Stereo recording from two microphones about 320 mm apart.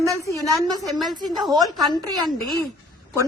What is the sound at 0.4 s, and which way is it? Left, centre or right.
Speech, centre.